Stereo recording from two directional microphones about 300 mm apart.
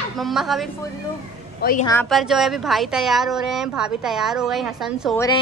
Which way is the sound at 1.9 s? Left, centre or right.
Centre.